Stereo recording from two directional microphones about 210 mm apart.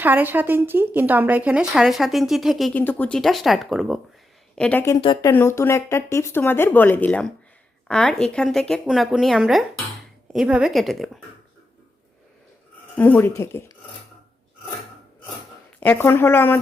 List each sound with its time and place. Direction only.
0.0 s speech: 10° right (ahead or behind); by 4.9 s 10° left (ahead or behind)
4.9 s speech: 25° left (ahead or behind)
5.3 s speech: 10° left (ahead or behind)
13.0 s speech: 10° left (ahead or behind)
15.8 s speech: 10° left (ahead or behind)